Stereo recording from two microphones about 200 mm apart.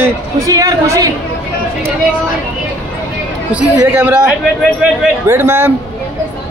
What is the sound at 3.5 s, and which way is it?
A woman's voice, 10° right (ahead or behind).